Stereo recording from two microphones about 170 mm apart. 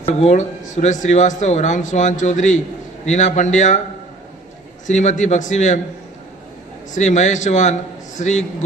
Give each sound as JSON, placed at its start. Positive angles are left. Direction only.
{"t": 0.0, "sound": "speech", "side_deg": 40}
{"t": 4.9, "sound": "speech", "side_deg": 45}
{"t": 6.9, "sound": "speech", "side_deg": 45}